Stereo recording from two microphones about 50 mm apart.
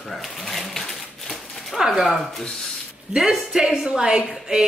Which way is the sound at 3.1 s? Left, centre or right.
Centre.